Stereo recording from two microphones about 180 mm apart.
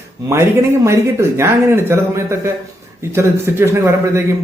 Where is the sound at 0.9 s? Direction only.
15° right (ahead or behind).